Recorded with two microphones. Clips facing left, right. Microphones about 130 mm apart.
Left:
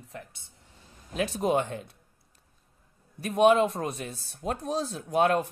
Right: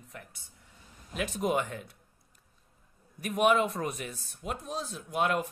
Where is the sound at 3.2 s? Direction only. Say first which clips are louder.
Left 5 dB; 30° left (ahead or behind).